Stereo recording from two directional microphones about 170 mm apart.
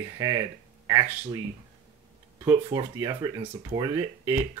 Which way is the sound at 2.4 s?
25° right (ahead or behind).